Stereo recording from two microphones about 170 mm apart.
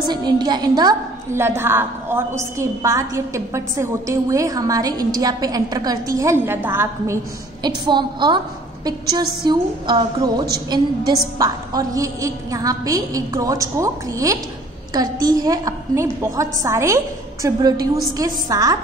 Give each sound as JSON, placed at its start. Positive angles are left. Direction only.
{"t": 0.1, "sound": "a woman's voice", "side_deg": -25}
{"t": 7.6, "sound": "a woman's voice", "side_deg": -25}
{"t": 9.4, "sound": "a woman's voice", "side_deg": -25}